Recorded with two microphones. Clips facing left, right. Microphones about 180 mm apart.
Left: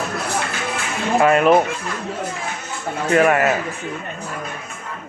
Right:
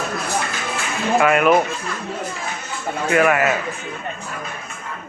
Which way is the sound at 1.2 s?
30° left (ahead or behind).